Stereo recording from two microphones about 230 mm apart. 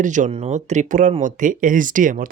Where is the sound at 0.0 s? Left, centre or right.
Right.